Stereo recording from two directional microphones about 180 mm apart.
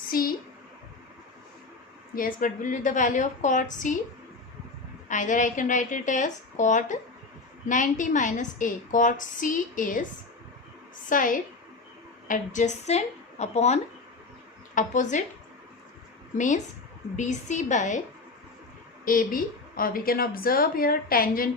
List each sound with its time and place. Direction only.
0.1 s speech: 55° left (ahead or behind)
2.1 s a woman's voice: 50° left (ahead or behind)
5.0 s a woman's voice: 45° left (ahead or behind)
11.1 s a woman's voice: 50° left (ahead or behind)
14.8 s a woman's voice: 45° left (ahead or behind)
17.2 s a woman's voice: 40° left (ahead or behind)
19.0 s a woman's voice: 50° left (ahead or behind)